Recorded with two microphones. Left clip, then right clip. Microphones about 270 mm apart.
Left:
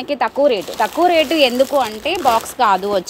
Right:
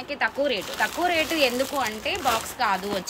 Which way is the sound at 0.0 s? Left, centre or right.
Left.